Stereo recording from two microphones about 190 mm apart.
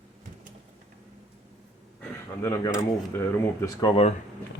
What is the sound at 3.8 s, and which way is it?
Speech, 30° left (ahead or behind).